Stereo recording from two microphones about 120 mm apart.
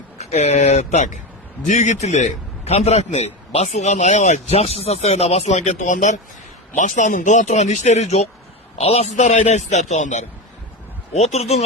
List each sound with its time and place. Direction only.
0.2 s a man's voice: 70° left (ahead or behind)
11.1 s speech: 65° left (ahead or behind)